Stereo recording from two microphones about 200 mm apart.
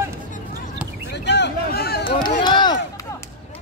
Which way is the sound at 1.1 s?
60° left (ahead or behind).